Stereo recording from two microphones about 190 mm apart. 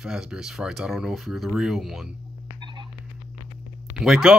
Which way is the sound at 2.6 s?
25° right (ahead or behind).